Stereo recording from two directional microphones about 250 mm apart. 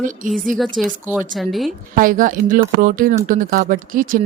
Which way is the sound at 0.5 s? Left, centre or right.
Centre.